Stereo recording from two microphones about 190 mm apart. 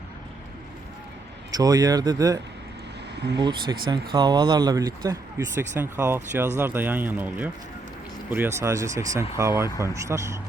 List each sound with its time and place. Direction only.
1.5 s speech: 20° right (ahead or behind)